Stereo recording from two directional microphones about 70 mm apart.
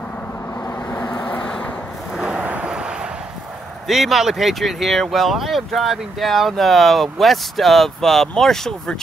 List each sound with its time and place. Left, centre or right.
0.8 s vehicle: left
1.2 s vehicle: centre
2.1 s a sound: centre
2.4 s vehicle: centre
3.8 s speech: centre